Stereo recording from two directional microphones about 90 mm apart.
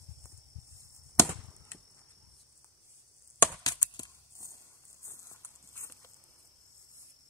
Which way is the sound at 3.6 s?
50° left (ahead or behind).